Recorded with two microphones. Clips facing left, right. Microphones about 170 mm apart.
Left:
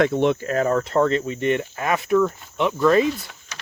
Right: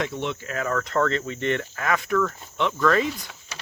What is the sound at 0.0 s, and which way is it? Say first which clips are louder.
Speech: left 10 dB; 50° left (ahead or behind).